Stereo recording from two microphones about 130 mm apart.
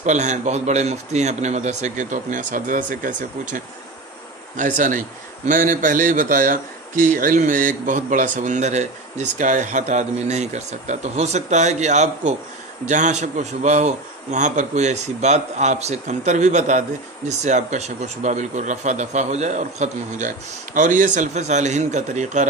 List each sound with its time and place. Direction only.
0.0 s a man's voice: 65° right (ahead or behind)